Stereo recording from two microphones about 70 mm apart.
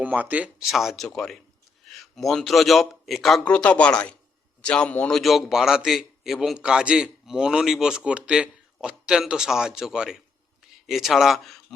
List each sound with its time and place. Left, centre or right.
0.0 s speech: right
0.6 s a man's voice: centre
1.0 s a man's voice: centre
3.4 s speech: centre
5.1 s a man's voice: centre